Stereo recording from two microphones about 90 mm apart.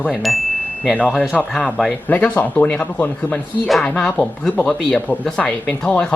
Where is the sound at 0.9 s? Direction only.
10° left (ahead or behind).